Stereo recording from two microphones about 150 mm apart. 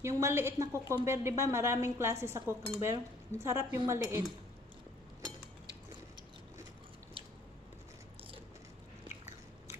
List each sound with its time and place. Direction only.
0.0 s a woman's voice: 20° right (ahead or behind)
1.0 s dishes: 20° right (ahead or behind)